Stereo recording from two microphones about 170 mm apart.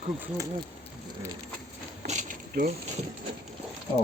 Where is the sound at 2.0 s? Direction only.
45° right (ahead or behind).